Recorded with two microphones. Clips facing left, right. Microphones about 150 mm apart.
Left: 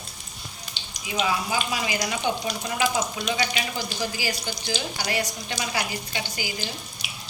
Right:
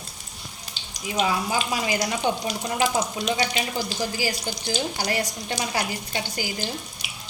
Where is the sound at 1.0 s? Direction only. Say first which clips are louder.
Right 2 dB; 45° right (ahead or behind).